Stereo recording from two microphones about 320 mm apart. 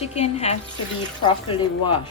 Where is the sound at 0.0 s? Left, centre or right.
Centre.